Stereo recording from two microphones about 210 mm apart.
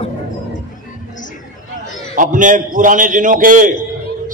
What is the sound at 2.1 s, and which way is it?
A man's voice, 40° right (ahead or behind).